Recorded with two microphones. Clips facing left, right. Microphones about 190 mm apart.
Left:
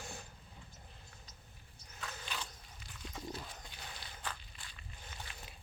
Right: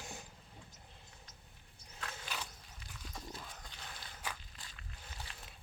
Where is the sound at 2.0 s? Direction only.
5° right (ahead or behind).